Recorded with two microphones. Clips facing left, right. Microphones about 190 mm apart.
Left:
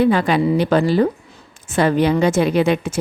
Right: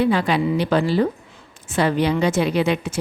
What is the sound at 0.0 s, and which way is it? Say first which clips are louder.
A woman's voice: left 3 dB; 50° left (ahead or behind).